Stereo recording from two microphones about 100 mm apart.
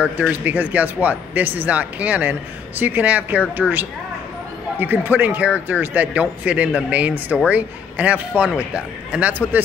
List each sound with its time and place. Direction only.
0.2 s a man's voice: 15° right (ahead or behind)